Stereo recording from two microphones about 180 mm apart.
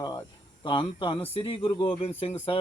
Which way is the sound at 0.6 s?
25° left (ahead or behind).